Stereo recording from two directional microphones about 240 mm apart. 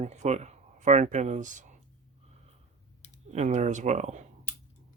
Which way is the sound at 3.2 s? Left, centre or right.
Right.